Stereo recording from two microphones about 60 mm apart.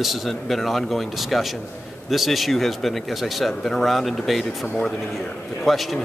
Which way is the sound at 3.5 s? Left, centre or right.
Centre.